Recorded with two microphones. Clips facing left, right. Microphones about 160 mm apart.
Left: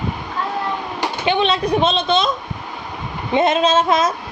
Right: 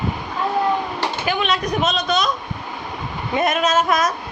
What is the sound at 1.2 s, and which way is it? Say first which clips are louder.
Speech: left 6 dB; 25° left (ahead or behind).